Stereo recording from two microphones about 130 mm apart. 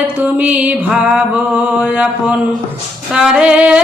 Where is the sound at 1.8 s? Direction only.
10° right (ahead or behind).